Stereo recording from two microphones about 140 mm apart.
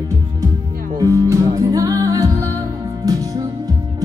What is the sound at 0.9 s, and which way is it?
Music, 20° right (ahead or behind).